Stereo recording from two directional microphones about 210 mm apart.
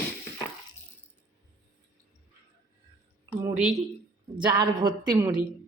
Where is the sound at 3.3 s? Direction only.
15° right (ahead or behind).